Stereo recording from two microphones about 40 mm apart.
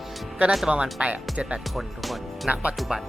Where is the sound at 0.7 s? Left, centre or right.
Right.